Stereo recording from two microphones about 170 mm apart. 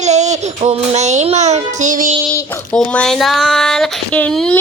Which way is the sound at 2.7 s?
5° left (ahead or behind).